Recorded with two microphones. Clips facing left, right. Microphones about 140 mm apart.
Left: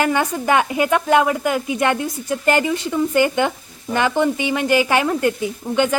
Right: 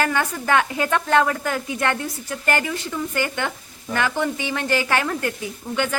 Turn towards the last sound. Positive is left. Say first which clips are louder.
# left 6 dB
turn(degrees=20)  # may be behind; listen again after turning